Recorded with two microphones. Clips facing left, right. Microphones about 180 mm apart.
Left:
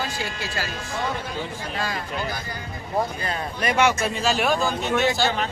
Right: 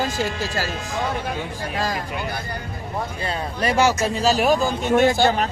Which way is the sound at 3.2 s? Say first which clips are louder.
Right 2 dB; 30° right (ahead or behind).